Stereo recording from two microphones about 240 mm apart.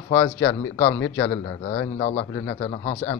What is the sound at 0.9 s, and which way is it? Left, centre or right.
Speech, left.